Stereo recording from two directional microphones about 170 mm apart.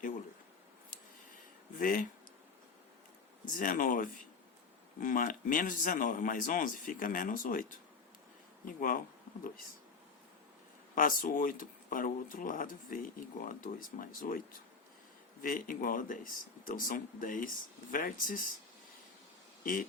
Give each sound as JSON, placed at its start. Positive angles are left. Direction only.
{"t": 1.8, "sound": "speech", "side_deg": 55}
{"t": 3.4, "sound": "speech", "side_deg": 50}
{"t": 10.9, "sound": "speech", "side_deg": 50}